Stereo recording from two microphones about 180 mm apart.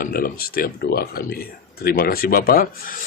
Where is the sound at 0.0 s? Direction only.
55° left (ahead or behind).